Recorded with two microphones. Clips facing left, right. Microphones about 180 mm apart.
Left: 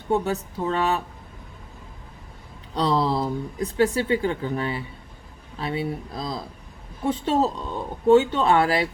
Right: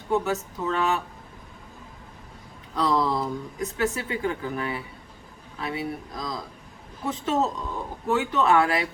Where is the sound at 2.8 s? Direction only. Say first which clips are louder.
Left 2 dB; 30° left (ahead or behind).